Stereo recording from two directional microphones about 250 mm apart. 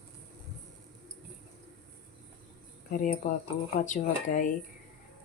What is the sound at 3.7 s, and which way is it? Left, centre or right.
Speech, left.